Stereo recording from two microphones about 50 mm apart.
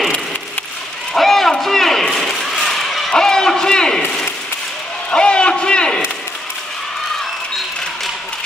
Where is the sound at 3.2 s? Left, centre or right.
Centre.